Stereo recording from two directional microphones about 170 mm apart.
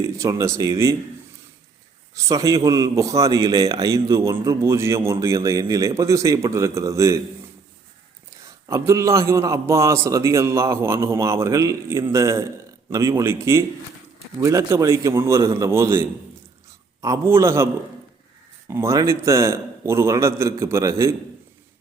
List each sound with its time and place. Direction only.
0.0 s a man's voice: 20° right (ahead or behind)
2.1 s a man's voice: 20° right (ahead or behind)
8.3 s a man's voice: 20° right (ahead or behind)
18.7 s a man's voice: 15° right (ahead or behind)